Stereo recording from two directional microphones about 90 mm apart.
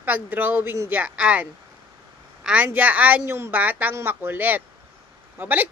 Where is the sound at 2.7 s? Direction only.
15° right (ahead or behind).